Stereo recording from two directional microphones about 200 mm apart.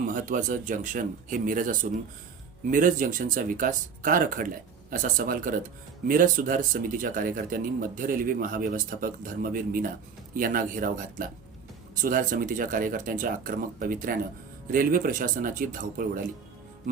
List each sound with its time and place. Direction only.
0.0 s speech: 40° right (ahead or behind)